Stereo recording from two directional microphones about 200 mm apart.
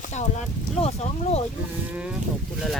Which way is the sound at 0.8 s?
30° left (ahead or behind).